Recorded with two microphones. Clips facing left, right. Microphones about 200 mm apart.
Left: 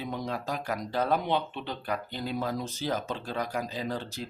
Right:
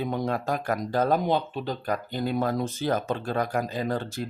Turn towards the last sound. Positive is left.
turn(degrees=-50)  # may be behind; listen again after turning